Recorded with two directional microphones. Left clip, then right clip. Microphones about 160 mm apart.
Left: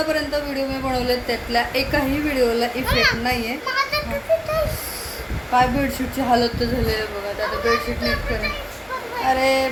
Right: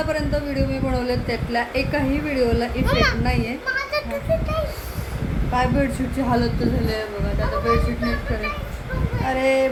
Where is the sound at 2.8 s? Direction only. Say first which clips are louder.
Left 1 dB; 80° right.